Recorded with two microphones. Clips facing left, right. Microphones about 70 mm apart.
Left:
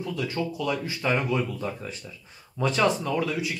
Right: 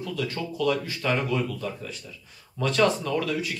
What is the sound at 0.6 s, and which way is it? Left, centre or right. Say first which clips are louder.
Speech: right 3 dB; centre.